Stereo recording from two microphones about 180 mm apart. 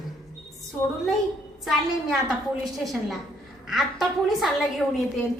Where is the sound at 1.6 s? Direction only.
Centre (ahead or behind).